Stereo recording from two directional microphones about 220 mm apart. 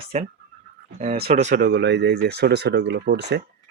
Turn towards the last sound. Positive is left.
turn(degrees=-50)  # may be behind; listen again after turning